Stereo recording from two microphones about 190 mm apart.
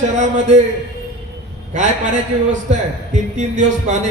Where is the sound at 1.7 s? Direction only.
40° right (ahead or behind).